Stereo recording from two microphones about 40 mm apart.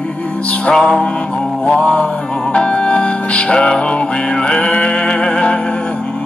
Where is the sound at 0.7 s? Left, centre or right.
Centre.